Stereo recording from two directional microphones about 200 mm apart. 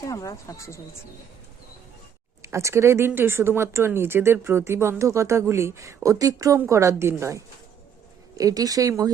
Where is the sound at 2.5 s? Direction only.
15° right (ahead or behind).